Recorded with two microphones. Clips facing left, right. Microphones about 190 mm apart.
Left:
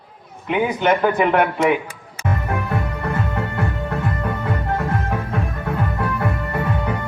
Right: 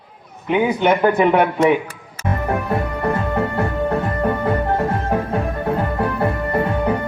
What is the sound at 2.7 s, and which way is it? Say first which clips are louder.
Music: right 4 dB; 35° right (ahead or behind).